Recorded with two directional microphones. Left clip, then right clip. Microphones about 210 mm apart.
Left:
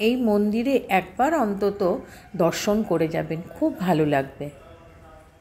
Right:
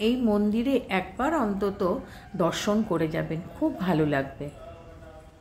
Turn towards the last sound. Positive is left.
turn(degrees=15)  # may be behind; listen again after turning